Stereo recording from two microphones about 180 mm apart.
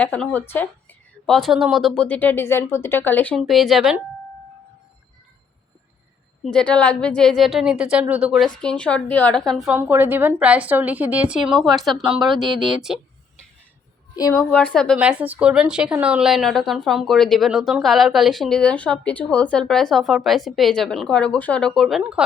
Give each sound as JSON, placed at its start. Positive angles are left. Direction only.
{"t": 0.0, "sound": "a woman's voice", "side_deg": 10}
{"t": 6.4, "sound": "a woman's voice", "side_deg": 5}
{"t": 9.7, "sound": "a woman's voice", "side_deg": -10}
{"t": 14.2, "sound": "a woman's voice", "side_deg": 20}
{"t": 14.5, "sound": "a woman's voice", "side_deg": 5}
{"t": 14.9, "sound": "a woman's voice", "side_deg": -5}